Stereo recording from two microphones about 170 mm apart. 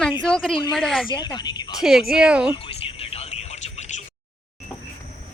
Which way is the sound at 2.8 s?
35° left (ahead or behind).